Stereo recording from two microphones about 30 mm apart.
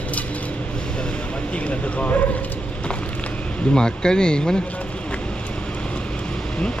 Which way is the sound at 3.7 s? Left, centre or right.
Left.